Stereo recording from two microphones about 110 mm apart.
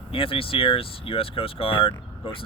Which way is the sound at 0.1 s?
55° left (ahead or behind).